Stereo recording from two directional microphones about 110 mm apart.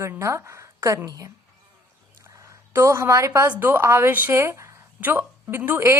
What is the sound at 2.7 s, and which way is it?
A woman's voice, 25° right (ahead or behind).